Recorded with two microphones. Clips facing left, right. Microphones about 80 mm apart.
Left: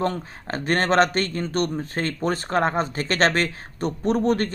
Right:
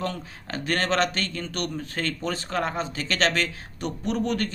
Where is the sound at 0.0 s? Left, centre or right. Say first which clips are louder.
Left 6 dB; left.